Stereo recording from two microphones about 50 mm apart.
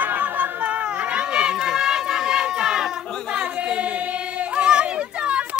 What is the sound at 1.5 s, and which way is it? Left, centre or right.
Run, centre.